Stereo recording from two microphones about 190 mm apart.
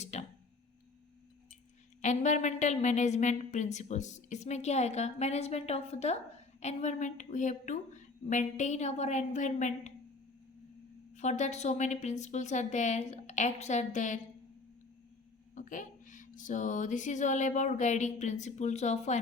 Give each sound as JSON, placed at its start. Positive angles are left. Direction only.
{"t": 0.0, "sound": "a sound", "side_deg": 35}
{"t": 2.0, "sound": "a woman's voice", "side_deg": 40}
{"t": 11.1, "sound": "a woman's voice", "side_deg": 40}
{"t": 15.5, "sound": "a woman's voice", "side_deg": 40}